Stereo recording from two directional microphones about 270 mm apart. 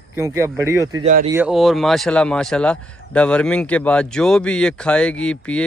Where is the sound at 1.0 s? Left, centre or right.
Right.